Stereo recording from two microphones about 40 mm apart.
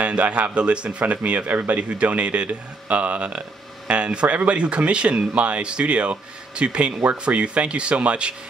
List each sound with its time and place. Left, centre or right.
0.0 s speech: right